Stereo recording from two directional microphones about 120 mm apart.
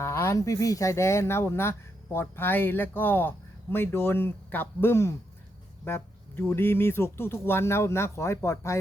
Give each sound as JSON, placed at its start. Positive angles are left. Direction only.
{"t": 0.0, "sound": "speech", "side_deg": 25}
{"t": 5.8, "sound": "a sound", "side_deg": 20}
{"t": 6.4, "sound": "speech", "side_deg": 20}